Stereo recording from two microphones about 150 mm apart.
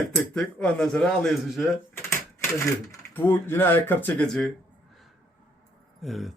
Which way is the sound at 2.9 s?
15° left (ahead or behind).